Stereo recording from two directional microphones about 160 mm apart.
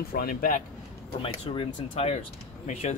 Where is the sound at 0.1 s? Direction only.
65° left (ahead or behind).